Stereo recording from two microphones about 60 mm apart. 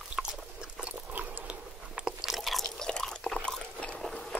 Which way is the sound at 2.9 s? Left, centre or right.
Centre.